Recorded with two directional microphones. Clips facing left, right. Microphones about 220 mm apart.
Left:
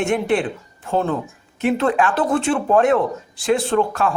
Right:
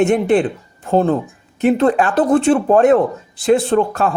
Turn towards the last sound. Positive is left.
turn(degrees=-35)  # may be behind; listen again after turning